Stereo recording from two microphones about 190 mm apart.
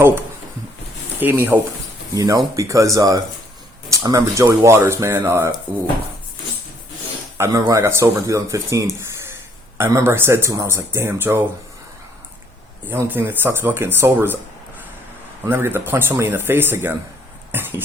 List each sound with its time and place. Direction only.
1.2 s speech: 10° right (ahead or behind)
7.3 s speech: 15° right (ahead or behind)
12.9 s speech: 10° right (ahead or behind)
15.4 s speech: 10° right (ahead or behind)
17.5 s a sound: 10° right (ahead or behind)